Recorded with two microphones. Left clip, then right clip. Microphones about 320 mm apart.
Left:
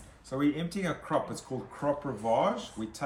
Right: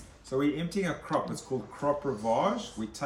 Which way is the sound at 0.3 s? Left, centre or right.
Centre.